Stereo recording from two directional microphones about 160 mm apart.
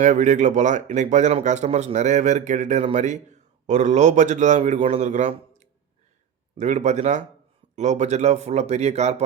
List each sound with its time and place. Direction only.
0.0 s speech: 50° right (ahead or behind)